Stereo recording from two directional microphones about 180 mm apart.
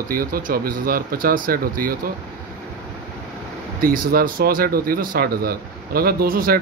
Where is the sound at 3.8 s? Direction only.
55° right (ahead or behind).